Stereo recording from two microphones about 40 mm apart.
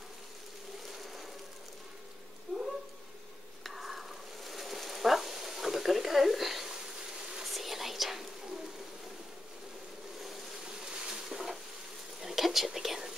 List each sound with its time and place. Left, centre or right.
3.6 s a sound: centre
7.4 s whispering: centre
10.7 s bee: centre
11.2 s stir: centre
12.2 s whispering: centre